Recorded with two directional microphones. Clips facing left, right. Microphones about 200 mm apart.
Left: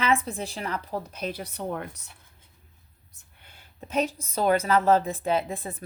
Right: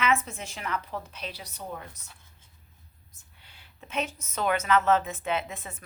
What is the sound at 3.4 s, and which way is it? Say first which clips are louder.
A woman's voice: left 6 dB; 45° left (ahead or behind).